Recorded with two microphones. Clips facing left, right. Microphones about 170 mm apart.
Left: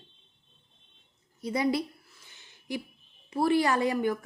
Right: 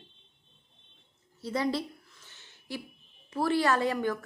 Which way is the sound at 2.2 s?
15° left (ahead or behind).